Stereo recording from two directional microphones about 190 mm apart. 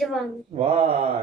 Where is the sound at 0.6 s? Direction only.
30° right (ahead or behind).